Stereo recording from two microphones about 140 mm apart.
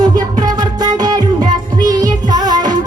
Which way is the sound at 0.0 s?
30° right (ahead or behind).